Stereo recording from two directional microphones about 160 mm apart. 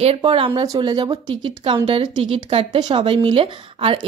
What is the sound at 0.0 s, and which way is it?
Speech, 35° right (ahead or behind).